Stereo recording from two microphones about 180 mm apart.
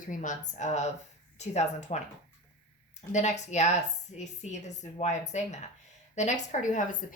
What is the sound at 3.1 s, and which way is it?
A woman's voice, 40° left (ahead or behind).